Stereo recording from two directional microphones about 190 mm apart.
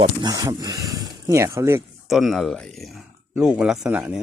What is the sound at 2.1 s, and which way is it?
Speech, centre (ahead or behind).